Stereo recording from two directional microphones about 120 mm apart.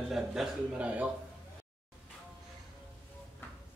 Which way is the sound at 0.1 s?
5° right (ahead or behind).